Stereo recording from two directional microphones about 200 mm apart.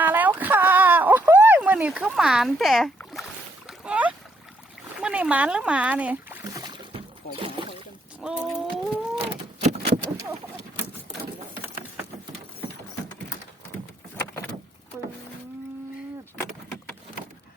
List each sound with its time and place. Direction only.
0.0 s a sound: 10° right (ahead or behind)
4.9 s speech: 5° right (ahead or behind)
7.6 s boat: 25° right (ahead or behind)
8.2 s speech: 5° right (ahead or behind)
8.7 s cat: 30° right (ahead or behind)